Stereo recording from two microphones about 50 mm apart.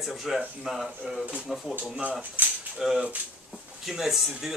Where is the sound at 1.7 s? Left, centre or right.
Right.